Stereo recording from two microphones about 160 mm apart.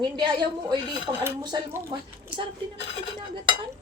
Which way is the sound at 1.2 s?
15° right (ahead or behind).